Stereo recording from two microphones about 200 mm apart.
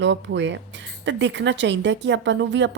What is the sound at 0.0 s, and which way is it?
A woman's voice, 65° right (ahead or behind).